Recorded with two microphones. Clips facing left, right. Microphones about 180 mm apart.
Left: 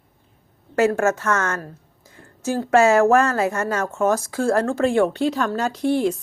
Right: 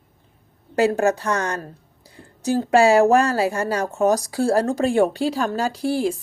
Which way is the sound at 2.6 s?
30° right (ahead or behind).